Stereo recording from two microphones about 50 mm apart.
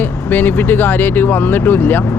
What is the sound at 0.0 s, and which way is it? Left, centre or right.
Speech, left.